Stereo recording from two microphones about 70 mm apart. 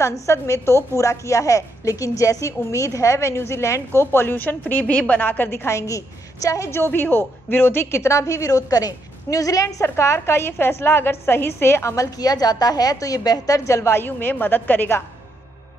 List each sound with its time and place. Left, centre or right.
0.0 s a woman's voice: left
6.7 s a woman's voice: left
9.8 s a woman's voice: left
13.7 s a woman's voice: left